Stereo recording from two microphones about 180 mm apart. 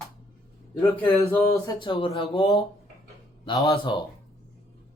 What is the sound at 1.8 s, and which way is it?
Speech, 30° left (ahead or behind).